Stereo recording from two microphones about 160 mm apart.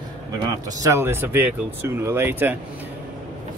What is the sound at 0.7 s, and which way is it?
Speech, 20° right (ahead or behind).